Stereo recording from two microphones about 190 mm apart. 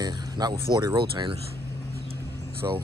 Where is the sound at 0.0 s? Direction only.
20° right (ahead or behind).